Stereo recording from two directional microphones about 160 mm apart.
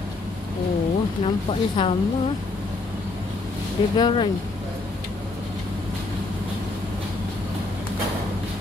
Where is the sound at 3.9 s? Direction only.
30° left (ahead or behind).